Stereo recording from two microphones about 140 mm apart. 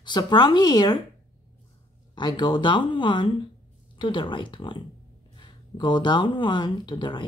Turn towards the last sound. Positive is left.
turn(degrees=35)  # may be behind; listen again after turning